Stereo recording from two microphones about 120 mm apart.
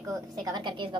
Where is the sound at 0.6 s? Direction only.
40° right (ahead or behind).